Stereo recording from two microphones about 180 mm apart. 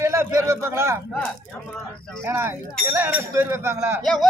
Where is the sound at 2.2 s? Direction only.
15° right (ahead or behind).